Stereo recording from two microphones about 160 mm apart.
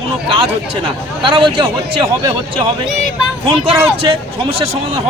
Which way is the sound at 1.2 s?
30° right (ahead or behind).